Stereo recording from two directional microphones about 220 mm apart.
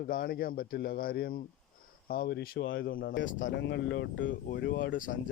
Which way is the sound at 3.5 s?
50° left (ahead or behind).